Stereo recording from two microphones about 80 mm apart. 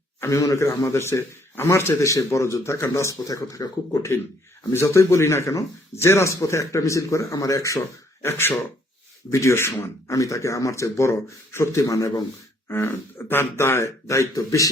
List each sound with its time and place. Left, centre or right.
0.2 s speech: left
4.7 s speech: left